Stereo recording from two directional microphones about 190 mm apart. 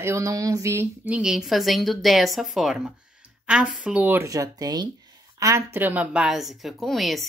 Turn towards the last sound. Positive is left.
turn(degrees=0)  # may be behind; listen again after turning